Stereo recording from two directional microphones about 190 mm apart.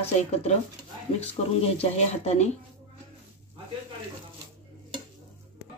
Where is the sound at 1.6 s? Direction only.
30° left (ahead or behind).